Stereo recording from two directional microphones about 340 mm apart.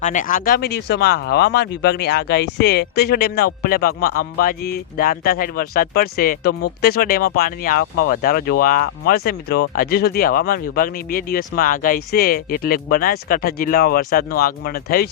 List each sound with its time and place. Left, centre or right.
0.0 s speech: left